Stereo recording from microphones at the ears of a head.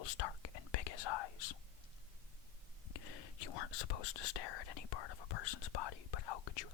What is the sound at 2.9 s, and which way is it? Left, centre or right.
Speech, left.